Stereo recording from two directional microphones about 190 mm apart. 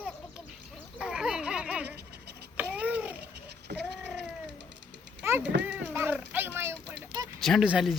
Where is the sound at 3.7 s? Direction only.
60° right (ahead or behind).